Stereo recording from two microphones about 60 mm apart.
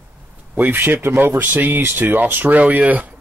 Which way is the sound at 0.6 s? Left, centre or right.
Right.